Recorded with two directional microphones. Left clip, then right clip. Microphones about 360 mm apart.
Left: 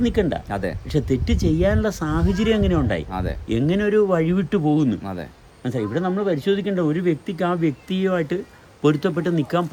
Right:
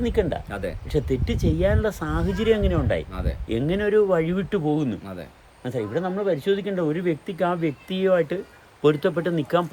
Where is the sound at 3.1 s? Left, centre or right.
Centre.